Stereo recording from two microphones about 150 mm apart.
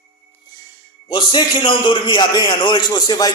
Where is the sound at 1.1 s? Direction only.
35° left (ahead or behind).